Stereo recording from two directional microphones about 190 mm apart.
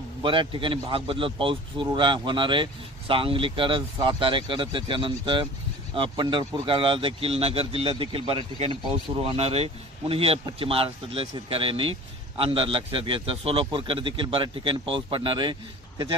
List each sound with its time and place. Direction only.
0.2 s speech: 25° right (ahead or behind)